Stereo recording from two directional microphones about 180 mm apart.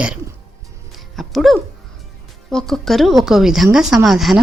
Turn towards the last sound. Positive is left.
turn(degrees=0)  # may be behind; listen again after turning